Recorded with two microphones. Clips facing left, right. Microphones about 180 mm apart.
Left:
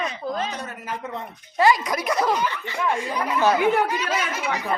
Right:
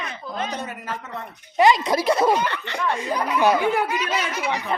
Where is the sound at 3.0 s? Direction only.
15° right (ahead or behind).